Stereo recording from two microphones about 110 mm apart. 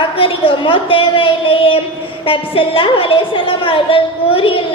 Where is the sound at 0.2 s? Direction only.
55° left (ahead or behind).